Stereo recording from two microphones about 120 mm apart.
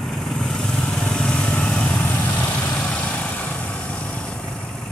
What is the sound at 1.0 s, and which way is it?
Lawn mower, 5° left (ahead or behind).